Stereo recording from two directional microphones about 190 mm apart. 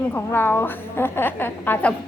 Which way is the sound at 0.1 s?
10° left (ahead or behind).